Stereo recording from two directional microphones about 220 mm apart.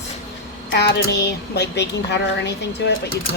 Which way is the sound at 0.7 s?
50° left (ahead or behind).